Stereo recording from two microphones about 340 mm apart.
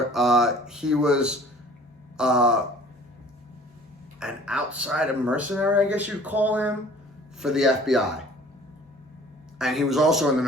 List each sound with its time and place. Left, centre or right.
0.1 s speech: centre
4.2 s speech: centre
9.6 s speech: centre